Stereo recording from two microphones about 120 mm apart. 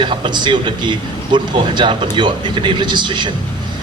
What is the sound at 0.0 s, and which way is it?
A man's voice, 45° right (ahead or behind).